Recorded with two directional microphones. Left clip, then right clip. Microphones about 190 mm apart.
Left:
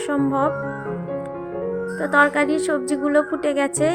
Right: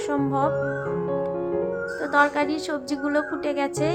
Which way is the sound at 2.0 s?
20° left (ahead or behind).